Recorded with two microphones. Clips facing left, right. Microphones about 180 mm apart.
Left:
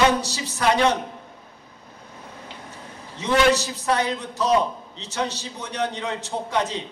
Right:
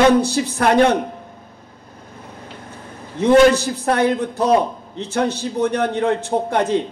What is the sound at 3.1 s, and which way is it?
A man's voice, 55° right (ahead or behind).